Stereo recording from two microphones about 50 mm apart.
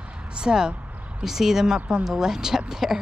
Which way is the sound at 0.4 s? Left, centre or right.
Centre.